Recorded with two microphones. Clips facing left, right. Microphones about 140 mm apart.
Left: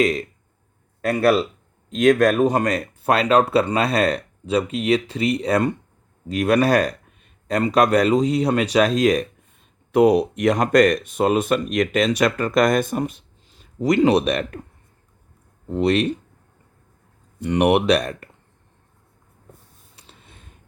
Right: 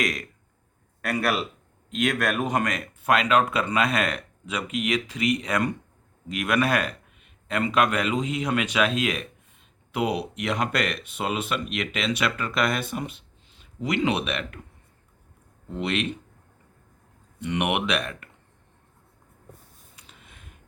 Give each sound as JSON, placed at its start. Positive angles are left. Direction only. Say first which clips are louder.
{"t": 0.0, "sound": "speech", "louder": "left 9 dB", "side_deg": 30}
{"t": 15.7, "sound": "speech", "louder": "left 9 dB", "side_deg": 40}
{"t": 17.4, "sound": "speech", "louder": "left 9 dB", "side_deg": 40}
{"t": 20.0, "sound": "a sound", "louder": "left 3 dB", "side_deg": 35}